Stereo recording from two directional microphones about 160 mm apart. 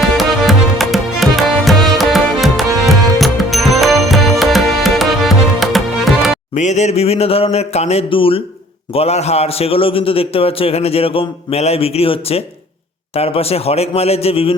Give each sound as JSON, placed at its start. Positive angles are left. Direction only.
{"t": 0.0, "sound": "music", "side_deg": 0}
{"t": 6.6, "sound": "a man's voice", "side_deg": 45}